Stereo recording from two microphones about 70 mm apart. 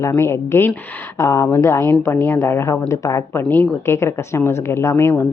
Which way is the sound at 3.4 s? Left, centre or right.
Left.